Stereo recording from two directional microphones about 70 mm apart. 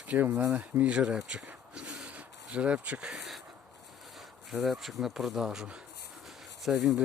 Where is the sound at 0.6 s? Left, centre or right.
Centre.